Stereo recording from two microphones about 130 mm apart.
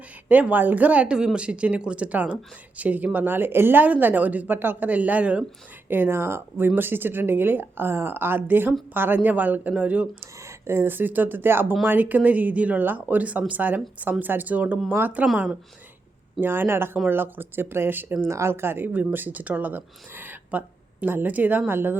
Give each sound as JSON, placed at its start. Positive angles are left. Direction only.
{"t": 0.3, "sound": "speech", "side_deg": -15}
{"t": 16.4, "sound": "speech", "side_deg": -15}